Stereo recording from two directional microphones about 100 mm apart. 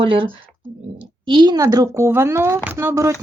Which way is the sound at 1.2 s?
50° right (ahead or behind).